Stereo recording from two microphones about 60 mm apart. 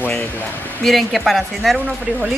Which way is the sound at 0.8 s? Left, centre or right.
Centre.